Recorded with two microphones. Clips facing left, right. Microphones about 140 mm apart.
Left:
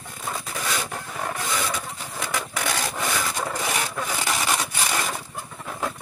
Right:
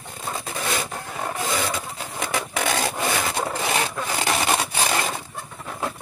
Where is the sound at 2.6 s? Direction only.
25° right (ahead or behind).